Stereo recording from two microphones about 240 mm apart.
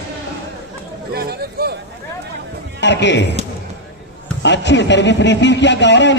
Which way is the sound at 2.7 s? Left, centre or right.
Left.